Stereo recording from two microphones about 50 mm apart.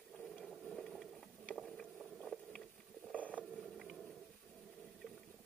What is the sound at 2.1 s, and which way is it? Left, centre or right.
Vehicle, centre.